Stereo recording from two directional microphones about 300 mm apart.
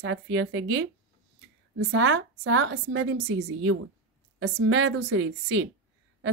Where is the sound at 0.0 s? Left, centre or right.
Right.